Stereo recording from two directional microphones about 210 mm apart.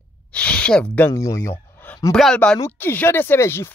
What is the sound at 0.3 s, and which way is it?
Speech, 5° left (ahead or behind).